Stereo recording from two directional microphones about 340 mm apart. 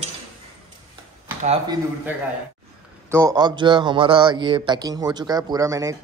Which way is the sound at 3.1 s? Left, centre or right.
Centre.